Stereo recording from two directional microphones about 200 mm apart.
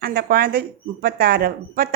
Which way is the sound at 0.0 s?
50° right (ahead or behind).